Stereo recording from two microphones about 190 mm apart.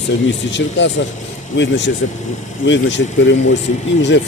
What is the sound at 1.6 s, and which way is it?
Speech, 70° left (ahead or behind).